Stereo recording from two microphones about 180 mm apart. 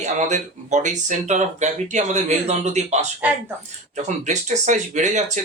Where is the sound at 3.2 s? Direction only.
10° right (ahead or behind).